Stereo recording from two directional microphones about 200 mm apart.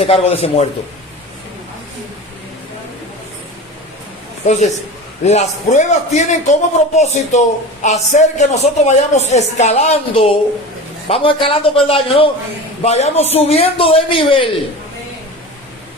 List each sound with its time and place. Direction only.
0.0 s a man's voice: 30° left (ahead or behind)
4.4 s a man's voice: 35° left (ahead or behind)